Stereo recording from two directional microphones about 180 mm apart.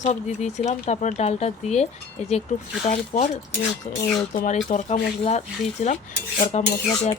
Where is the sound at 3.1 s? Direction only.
45° left (ahead or behind).